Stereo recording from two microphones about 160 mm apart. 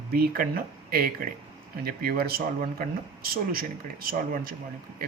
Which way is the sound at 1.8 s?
70° right (ahead or behind).